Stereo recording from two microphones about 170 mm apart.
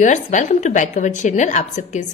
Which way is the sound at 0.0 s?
45° left (ahead or behind).